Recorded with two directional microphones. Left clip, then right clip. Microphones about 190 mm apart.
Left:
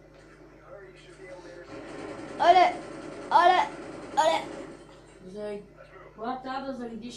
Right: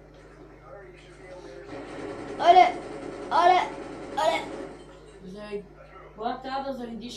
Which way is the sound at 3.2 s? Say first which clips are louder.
Even; 40° left (ahead or behind).